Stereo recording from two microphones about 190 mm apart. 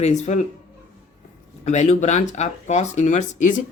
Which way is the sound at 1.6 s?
35° left (ahead or behind).